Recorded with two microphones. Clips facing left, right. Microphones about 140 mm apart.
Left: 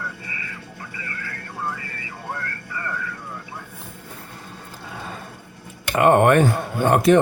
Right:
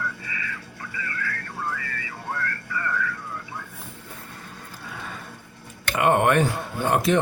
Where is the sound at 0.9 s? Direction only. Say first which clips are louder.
Right 4 dB; 30° left (ahead or behind).